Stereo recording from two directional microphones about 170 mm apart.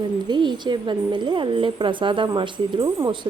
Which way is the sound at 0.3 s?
25° right (ahead or behind).